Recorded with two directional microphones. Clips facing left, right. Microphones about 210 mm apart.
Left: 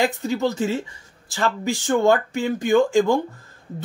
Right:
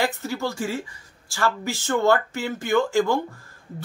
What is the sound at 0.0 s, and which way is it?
Speech, 20° left (ahead or behind).